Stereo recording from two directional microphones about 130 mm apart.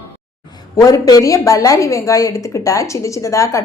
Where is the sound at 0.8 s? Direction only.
30° left (ahead or behind).